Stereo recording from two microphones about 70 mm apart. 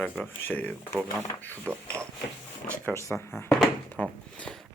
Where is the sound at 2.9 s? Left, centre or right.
Left.